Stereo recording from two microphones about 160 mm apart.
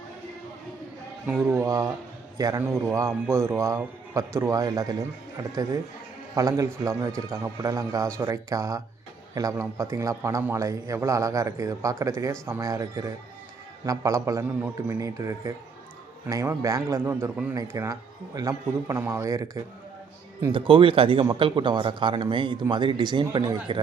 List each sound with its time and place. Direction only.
1.5 s a man's voice: 20° right (ahead or behind)
20.5 s a man's voice: 35° right (ahead or behind)